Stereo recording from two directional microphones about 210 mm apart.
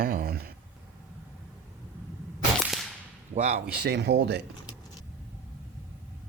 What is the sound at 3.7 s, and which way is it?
Speech, 50° right (ahead or behind).